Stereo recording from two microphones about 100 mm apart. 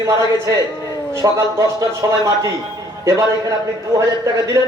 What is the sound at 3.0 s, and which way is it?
Speech, 30° right (ahead or behind).